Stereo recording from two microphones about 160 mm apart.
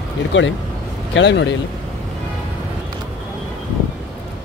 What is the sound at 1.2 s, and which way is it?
Speech, 90° left.